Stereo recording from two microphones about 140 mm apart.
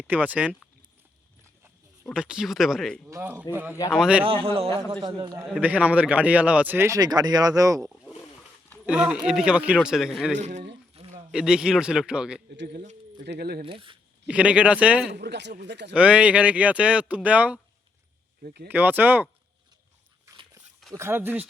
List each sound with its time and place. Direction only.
0.1 s a man's voice: 10° right (ahead or behind)
2.0 s a man's voice: 5° right (ahead or behind)
3.1 s a man's voice: 15° right (ahead or behind)
4.3 s a man's voice: 45° right (ahead or behind)
4.9 s a man's voice: 35° right (ahead or behind)
5.4 s a man's voice: 10° right (ahead or behind)
8.8 s a man's voice: 5° right (ahead or behind)
10.4 s a sound: 55° right (ahead or behind)
11.3 s a man's voice: 5° right (ahead or behind)
12.8 s speech: 65° right (ahead or behind); by 13.7 s 90° right
13.7 s a man's voice: 40° right (ahead or behind)
14.3 s a man's voice: 10° right (ahead or behind)
18.7 s a man's voice: 15° right (ahead or behind)
20.9 s a man's voice: 15° right (ahead or behind)